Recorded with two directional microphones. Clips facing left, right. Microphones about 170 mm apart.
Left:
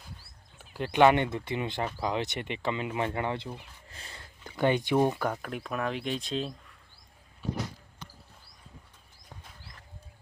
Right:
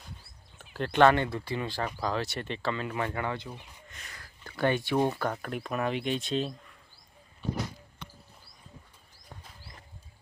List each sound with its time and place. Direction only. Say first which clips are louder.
0.6 s speech: even; 10° left (ahead or behind); by 4.3 s 30° left (ahead or behind)
4.4 s speech: left 2 dB; 15° left (ahead or behind)
5.4 s speech: right 1 dB; centre (ahead or behind)